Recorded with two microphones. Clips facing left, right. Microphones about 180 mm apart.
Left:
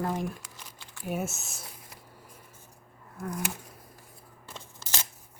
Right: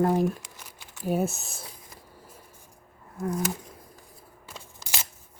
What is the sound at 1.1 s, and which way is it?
Speech, 35° right (ahead or behind).